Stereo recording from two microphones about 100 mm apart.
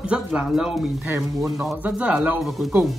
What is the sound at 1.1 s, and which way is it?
Speech, 20° right (ahead or behind).